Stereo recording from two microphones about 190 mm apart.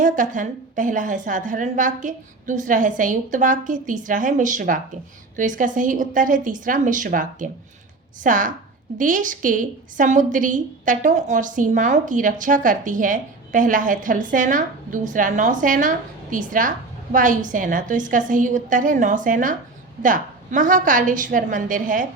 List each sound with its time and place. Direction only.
0.0 s a woman's voice: 45° right (ahead or behind)